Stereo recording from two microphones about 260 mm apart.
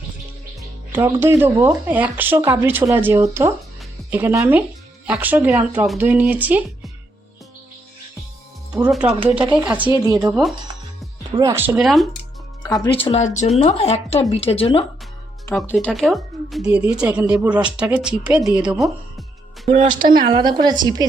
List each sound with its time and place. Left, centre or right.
0.9 s speech: centre
8.7 s speech: centre
11.3 s speech: centre
12.6 s speech: centre
13.1 s speech: left
15.4 s speech: centre
19.6 s speech: right